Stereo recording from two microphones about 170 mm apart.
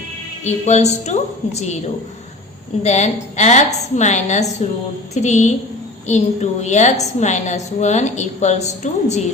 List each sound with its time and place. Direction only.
0.4 s a woman's voice: 40° left (ahead or behind)
2.8 s a woman's voice: 40° left (ahead or behind)